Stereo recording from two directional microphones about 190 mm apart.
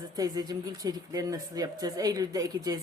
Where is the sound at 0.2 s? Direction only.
20° right (ahead or behind).